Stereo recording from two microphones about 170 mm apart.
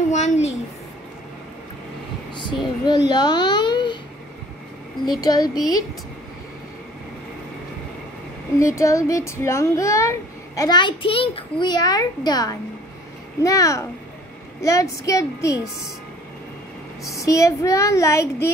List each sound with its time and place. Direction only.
0.1 s a woman's voice: 40° left (ahead or behind)
2.3 s a child's voice: 25° left (ahead or behind)
5.2 s a child's voice: 20° left (ahead or behind)
8.5 s a child's voice: 15° left (ahead or behind)
17.0 s a child's voice: 20° left (ahead or behind)